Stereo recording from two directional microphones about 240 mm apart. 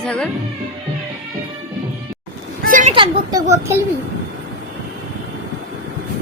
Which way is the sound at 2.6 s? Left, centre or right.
Right.